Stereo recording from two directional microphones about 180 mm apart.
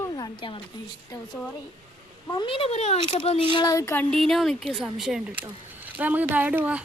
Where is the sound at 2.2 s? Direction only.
25° left (ahead or behind); by 6.8 s 10° right (ahead or behind).